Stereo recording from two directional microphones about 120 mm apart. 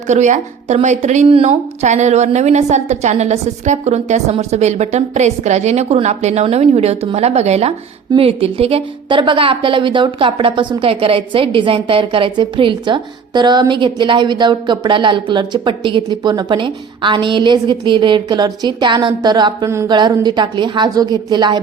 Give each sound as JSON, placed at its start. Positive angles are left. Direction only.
{"t": 0.1, "sound": "a woman's voice", "side_deg": -85}
{"t": 1.3, "sound": "a woman's voice", "side_deg": -60}
{"t": 6.4, "sound": "speech", "side_deg": -60}
{"t": 8.1, "sound": "a woman's voice", "side_deg": -50}
{"t": 19.6, "sound": "a sound", "side_deg": -25}
{"t": 19.9, "sound": "a woman's voice", "side_deg": -35}